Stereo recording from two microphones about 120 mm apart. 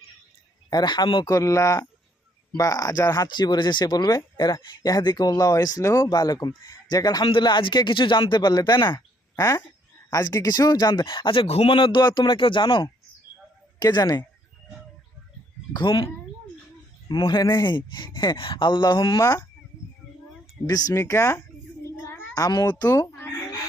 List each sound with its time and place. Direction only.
0.7 s speech: 35° left (ahead or behind)
9.3 s speech: 25° left (ahead or behind)
10.1 s speech: 35° left (ahead or behind)
15.7 s speech: 40° left (ahead or behind)
17.1 s speech: 40° left (ahead or behind)
19.2 s speech: 30° left (ahead or behind)
20.7 s speech: 30° left (ahead or behind)
21.9 s child singing: 20° left (ahead or behind)
22.4 s speech: 35° left (ahead or behind)